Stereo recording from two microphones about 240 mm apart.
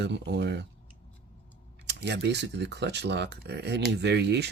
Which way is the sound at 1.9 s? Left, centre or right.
Right.